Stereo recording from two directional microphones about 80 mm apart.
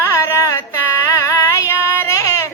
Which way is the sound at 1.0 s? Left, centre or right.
Left.